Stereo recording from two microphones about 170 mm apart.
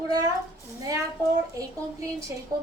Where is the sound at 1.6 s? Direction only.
20° right (ahead or behind).